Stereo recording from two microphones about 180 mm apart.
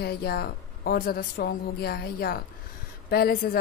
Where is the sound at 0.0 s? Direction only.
60° left (ahead or behind).